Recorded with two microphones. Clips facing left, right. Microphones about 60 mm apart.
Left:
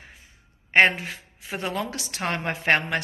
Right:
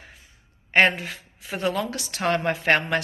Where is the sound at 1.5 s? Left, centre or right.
Left.